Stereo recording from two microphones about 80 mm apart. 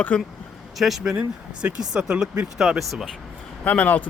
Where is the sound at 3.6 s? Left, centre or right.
Centre.